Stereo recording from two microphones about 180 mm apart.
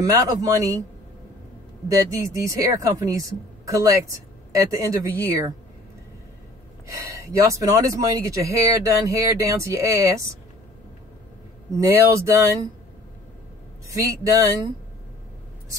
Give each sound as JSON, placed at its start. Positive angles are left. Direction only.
{"t": 0.0, "sound": "a woman's voice", "side_deg": -20}
{"t": 2.0, "sound": "a woman's voice", "side_deg": -20}
{"t": 6.9, "sound": "speech", "side_deg": -20}
{"t": 11.8, "sound": "speech", "side_deg": -15}
{"t": 13.9, "sound": "speech", "side_deg": -20}